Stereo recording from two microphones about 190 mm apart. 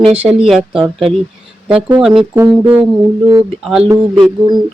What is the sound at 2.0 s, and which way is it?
Speech, centre (ahead or behind).